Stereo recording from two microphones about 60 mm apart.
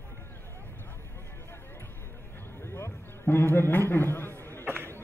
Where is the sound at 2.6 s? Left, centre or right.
Left.